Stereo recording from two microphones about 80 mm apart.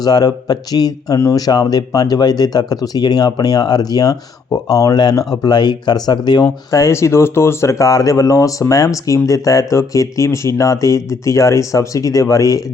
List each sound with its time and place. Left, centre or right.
0.0 s speech: left
6.7 s speech: left